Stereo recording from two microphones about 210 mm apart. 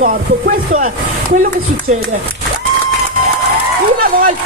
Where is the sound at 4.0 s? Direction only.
40° right (ahead or behind).